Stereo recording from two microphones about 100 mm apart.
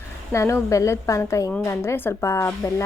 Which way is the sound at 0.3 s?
30° left (ahead or behind).